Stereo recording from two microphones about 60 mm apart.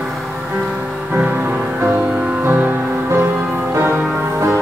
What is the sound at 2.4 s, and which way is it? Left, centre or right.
Music, right.